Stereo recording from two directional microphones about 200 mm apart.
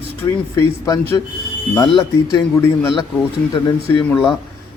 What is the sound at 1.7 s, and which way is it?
Speech, 20° left (ahead or behind).